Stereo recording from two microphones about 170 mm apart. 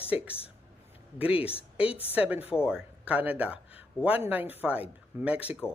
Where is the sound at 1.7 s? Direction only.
5° right (ahead or behind).